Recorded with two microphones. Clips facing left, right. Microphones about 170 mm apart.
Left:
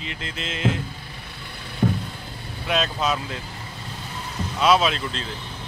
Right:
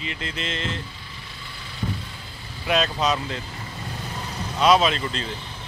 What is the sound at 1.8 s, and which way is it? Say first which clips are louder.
Vehicle: left 8 dB; 60° left (ahead or behind).